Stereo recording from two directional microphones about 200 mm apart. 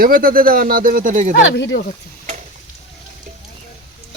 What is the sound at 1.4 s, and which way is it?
Speech, 65° left (ahead or behind).